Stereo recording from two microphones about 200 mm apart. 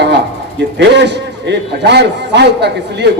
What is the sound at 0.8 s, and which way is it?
A man's voice, 60° right (ahead or behind).